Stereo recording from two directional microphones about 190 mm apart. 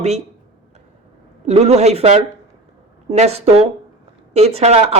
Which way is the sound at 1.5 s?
35° right (ahead or behind).